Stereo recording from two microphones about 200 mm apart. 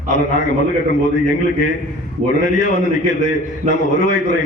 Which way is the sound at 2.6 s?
40° left (ahead or behind).